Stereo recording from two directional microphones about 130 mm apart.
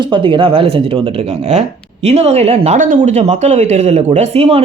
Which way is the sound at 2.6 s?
85° right.